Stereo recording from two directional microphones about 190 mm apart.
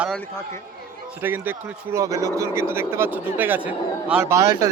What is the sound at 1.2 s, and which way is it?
Speech, 10° right (ahead or behind).